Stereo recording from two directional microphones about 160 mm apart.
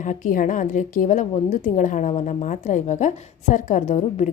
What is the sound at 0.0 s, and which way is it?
Speech, 55° left (ahead or behind).